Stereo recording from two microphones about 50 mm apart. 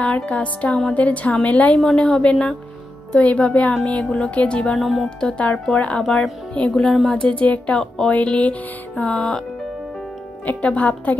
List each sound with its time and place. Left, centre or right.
0.0 s music: left
2.0 s speech: centre
3.2 s music: left
4.7 s speech: centre
5.4 s music: left
6.7 s speech: centre
7.2 s music: left
7.5 s a woman's voice: left
8.1 s music: left
10.4 s music: left